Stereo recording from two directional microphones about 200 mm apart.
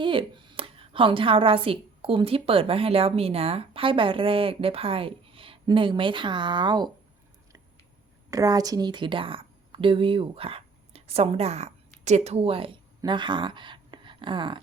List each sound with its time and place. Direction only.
0.0 s a woman's voice: 25° right (ahead or behind)
8.3 s a woman's voice: 20° right (ahead or behind)